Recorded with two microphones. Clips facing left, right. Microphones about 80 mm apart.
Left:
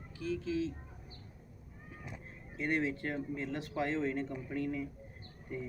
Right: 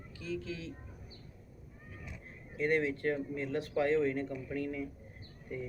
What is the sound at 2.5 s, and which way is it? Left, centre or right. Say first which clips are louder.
Speech: right 3 dB; left.